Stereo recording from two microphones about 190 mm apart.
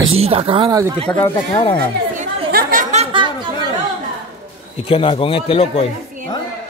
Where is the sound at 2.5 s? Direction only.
50° right (ahead or behind).